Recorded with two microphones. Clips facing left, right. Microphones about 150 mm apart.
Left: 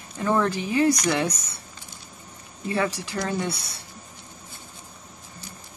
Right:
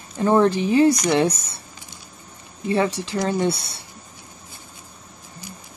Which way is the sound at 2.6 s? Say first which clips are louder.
Right 5 dB; 25° right (ahead or behind).